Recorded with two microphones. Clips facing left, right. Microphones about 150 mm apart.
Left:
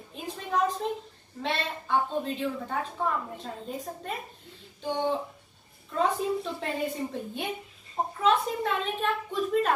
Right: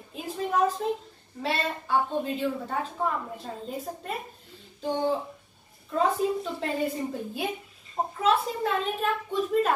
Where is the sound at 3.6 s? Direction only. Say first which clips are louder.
Right 2 dB; centre (ahead or behind).